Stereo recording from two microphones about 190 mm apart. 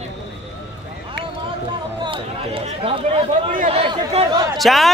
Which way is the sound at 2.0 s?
30° right (ahead or behind).